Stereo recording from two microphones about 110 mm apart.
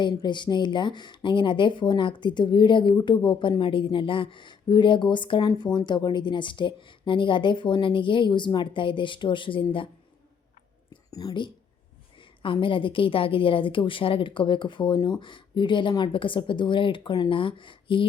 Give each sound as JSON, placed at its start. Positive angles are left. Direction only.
{"t": 0.0, "sound": "a woman's voice", "side_deg": 45}
{"t": 11.1, "sound": "a woman's voice", "side_deg": 35}
{"t": 12.4, "sound": "speech", "side_deg": 50}